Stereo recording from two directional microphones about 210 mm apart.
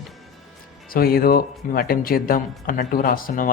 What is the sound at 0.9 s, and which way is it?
Speech, 45° left (ahead or behind).